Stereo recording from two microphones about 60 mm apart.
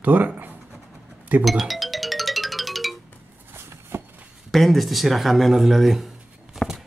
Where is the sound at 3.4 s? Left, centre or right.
Right.